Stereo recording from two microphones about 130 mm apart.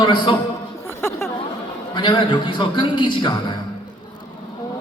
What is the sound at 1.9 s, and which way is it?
A man's voice, 35° left (ahead or behind).